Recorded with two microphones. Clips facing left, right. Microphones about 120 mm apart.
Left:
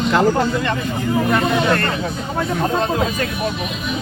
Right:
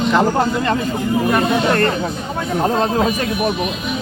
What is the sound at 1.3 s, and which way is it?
Speech, 30° right (ahead or behind).